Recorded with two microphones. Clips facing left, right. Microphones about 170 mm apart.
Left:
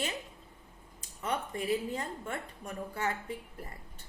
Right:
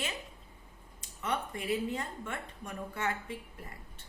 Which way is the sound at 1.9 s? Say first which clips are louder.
Left 1 dB; 35° left (ahead or behind).